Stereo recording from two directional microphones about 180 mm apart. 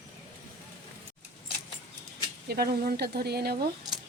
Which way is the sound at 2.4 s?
60° right (ahead or behind).